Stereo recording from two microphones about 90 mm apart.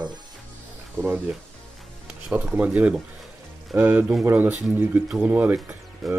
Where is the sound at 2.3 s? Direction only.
15° right (ahead or behind).